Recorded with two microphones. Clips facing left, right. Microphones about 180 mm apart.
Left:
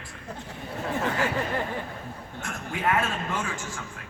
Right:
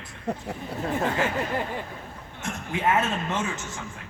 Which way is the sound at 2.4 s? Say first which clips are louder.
Right 3 dB; 20° right (ahead or behind).